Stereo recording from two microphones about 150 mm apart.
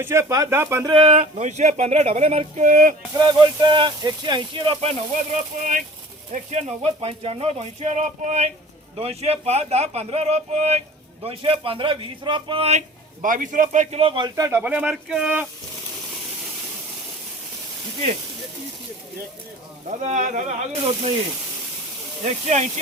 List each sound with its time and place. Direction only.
0.0 s speech: 20° right (ahead or behind)
0.9 s speech: 40° right (ahead or behind); by 2.9 s 60° right (ahead or behind)
3.2 s speech: 30° right (ahead or behind)
13.2 s a man's voice: 60° right (ahead or behind); by 15.4 s 5° right (ahead or behind)
19.9 s speech: 55° right (ahead or behind)
22.2 s speech: 50° right (ahead or behind)